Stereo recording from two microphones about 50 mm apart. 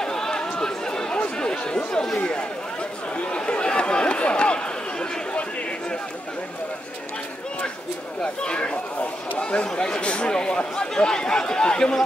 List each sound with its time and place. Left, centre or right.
0.0 s chatter: centre
2.1 s speech: left
3.3 s a sound: left
8.2 s speech: centre